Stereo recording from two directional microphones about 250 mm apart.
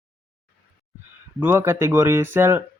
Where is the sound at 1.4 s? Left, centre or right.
Centre.